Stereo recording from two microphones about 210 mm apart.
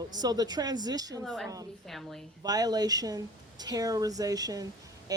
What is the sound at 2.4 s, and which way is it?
Speech, 20° right (ahead or behind).